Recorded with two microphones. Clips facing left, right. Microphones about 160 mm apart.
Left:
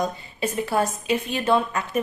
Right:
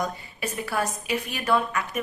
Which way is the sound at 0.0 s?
25° left (ahead or behind).